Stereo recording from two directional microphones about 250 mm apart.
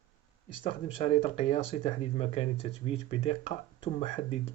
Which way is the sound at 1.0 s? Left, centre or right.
Left.